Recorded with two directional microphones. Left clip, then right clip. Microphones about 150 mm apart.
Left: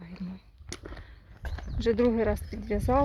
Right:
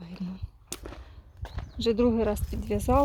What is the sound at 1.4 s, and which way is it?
Clip-clop, 55° left (ahead or behind).